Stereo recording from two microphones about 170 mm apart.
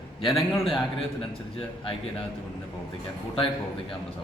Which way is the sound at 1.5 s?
30° left (ahead or behind).